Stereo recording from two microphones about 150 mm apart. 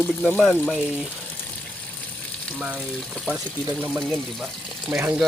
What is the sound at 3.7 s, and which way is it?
Speech, 10° right (ahead or behind).